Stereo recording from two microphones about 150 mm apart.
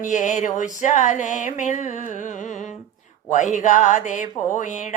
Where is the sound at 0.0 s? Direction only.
55° left (ahead or behind).